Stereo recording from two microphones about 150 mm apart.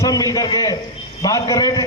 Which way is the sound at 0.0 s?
25° left (ahead or behind).